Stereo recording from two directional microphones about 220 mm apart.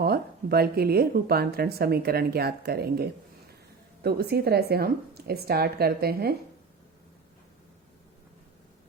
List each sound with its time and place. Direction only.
0.0 s speech: 45° right (ahead or behind)